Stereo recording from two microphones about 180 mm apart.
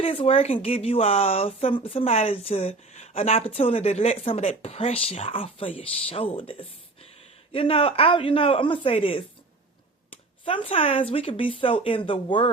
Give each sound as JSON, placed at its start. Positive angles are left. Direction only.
{"t": 0.0, "sound": "speech", "side_deg": 30}